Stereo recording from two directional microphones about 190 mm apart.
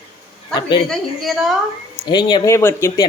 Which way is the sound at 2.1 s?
20° left (ahead or behind).